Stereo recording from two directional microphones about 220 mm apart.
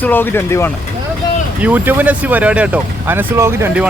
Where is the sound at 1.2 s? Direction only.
20° left (ahead or behind).